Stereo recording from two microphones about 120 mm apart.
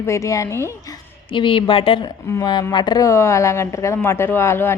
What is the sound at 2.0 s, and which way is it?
A woman's voice, 30° left (ahead or behind).